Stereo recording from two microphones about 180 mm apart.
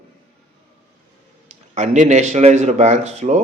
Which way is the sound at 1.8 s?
40° right (ahead or behind).